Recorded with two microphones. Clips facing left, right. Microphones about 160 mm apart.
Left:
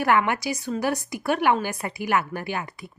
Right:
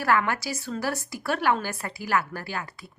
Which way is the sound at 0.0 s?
20° left (ahead or behind).